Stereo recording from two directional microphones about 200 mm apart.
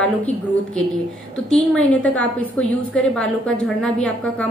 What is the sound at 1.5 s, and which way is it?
A woman's voice, 5° left (ahead or behind).